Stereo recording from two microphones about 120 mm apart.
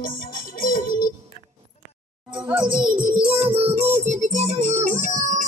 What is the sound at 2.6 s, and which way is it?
Music, 45° right (ahead or behind).